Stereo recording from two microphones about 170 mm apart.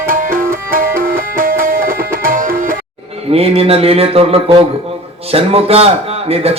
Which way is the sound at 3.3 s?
35° right (ahead or behind).